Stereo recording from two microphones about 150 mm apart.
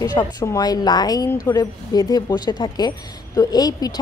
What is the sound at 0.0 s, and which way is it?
A woman's voice, 25° left (ahead or behind).